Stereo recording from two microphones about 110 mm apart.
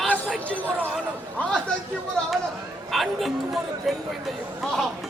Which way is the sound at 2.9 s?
Centre (ahead or behind).